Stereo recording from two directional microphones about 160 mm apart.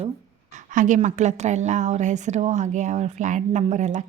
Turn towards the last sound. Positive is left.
turn(degrees=-50)  # may be behind; listen again after turning